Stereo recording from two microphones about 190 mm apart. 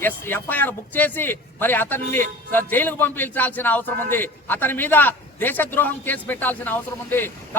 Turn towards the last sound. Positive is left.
turn(degrees=10)  # may be behind; listen again after turning